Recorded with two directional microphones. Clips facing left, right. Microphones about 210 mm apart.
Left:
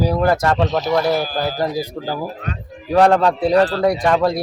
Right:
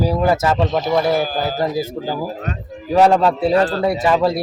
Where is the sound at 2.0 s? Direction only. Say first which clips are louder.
Right 1 dB; 5° right (ahead or behind).